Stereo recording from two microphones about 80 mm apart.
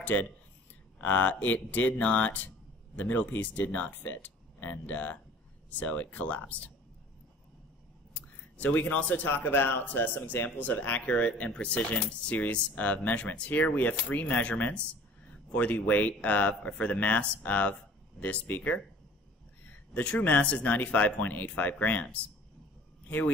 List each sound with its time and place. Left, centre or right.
0.0 s speech: left
8.1 s speech: centre
19.9 s a man's voice: centre